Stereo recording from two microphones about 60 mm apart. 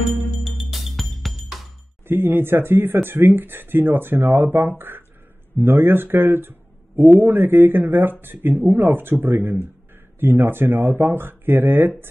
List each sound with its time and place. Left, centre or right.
0.4 s music: centre
2.0 s speech: right